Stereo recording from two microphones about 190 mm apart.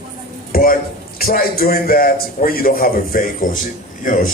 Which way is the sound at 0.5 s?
50° left (ahead or behind).